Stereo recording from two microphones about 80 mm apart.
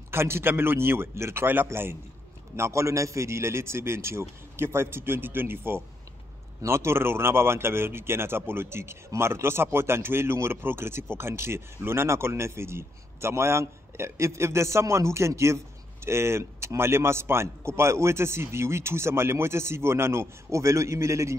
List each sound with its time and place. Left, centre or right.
0.1 s speech: right